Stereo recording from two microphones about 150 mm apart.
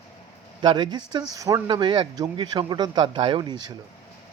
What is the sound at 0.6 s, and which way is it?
Speech, 35° right (ahead or behind).